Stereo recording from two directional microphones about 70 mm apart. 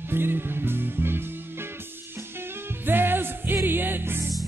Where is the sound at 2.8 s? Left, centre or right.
Right.